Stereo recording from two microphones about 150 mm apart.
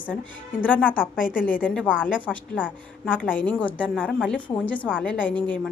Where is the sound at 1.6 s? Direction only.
10° left (ahead or behind).